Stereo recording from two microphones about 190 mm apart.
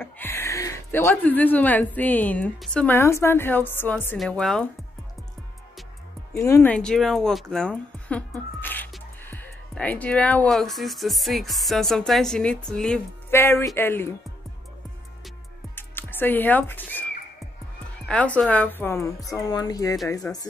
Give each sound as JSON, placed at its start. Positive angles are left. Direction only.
{"t": 0.0, "sound": "a woman's voice", "side_deg": 10}
{"t": 6.3, "sound": "speech", "side_deg": 15}
{"t": 8.5, "sound": "music", "side_deg": 10}
{"t": 9.2, "sound": "speech", "side_deg": 10}
{"t": 15.7, "sound": "music", "side_deg": 10}
{"t": 18.0, "sound": "speech", "side_deg": 5}